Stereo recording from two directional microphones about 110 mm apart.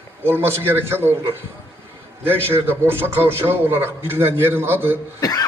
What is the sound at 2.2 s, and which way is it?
A man's voice, 20° right (ahead or behind).